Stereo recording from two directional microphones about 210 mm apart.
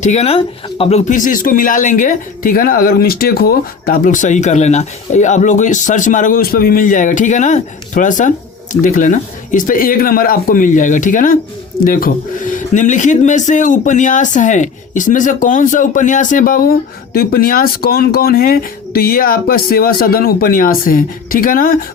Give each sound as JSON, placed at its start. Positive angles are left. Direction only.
{"t": 0.0, "sound": "speech", "side_deg": 30}